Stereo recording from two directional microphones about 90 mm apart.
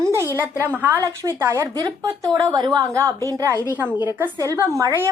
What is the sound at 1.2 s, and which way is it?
Speech, 35° right (ahead or behind).